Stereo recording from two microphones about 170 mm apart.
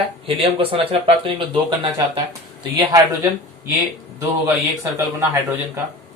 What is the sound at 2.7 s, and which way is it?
Speech, 20° right (ahead or behind).